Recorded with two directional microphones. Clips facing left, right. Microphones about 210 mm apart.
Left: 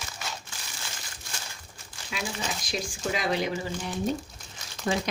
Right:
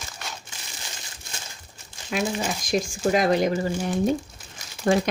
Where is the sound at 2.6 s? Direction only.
50° right (ahead or behind).